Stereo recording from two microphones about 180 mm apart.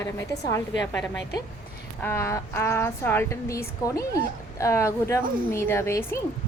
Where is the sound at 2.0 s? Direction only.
15° left (ahead or behind).